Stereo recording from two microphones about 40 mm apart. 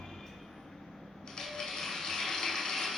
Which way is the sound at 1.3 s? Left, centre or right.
Centre.